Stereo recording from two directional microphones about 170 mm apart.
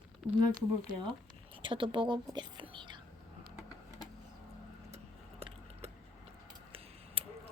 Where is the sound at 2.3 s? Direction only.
25° right (ahead or behind).